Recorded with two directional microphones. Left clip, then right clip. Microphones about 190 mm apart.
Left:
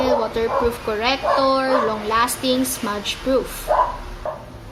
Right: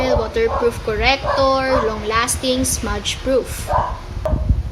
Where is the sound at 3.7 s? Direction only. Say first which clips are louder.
Left 2 dB; 30° right (ahead or behind).